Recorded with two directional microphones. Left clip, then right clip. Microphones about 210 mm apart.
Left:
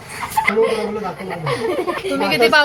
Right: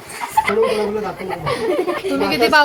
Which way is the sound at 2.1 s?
15° right (ahead or behind).